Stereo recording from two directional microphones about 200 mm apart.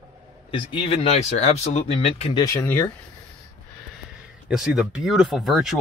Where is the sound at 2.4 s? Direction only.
10° left (ahead or behind).